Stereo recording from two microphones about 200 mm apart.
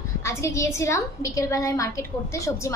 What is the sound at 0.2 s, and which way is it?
A woman's voice, 15° left (ahead or behind).